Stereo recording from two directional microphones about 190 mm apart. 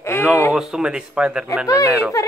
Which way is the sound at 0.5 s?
5° right (ahead or behind).